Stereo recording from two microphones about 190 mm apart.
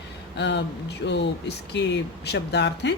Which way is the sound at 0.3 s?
65° left (ahead or behind).